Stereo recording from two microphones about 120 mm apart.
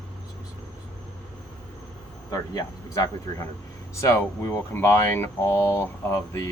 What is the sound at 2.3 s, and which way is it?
Speech, 30° left (ahead or behind).